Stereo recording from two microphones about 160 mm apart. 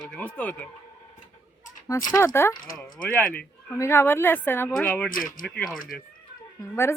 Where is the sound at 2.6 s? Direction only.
60° left (ahead or behind).